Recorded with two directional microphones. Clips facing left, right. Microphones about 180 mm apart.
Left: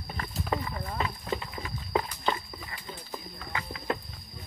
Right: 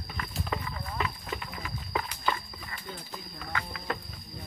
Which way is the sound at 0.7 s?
30° left (ahead or behind).